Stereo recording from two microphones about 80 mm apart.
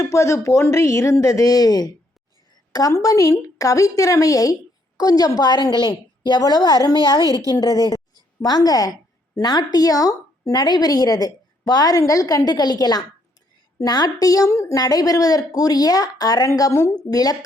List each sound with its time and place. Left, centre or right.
0.1 s speech: left
2.9 s a woman's voice: left
7.2 s a woman's voice: right
7.5 s a woman's voice: left
14.8 s a woman's voice: left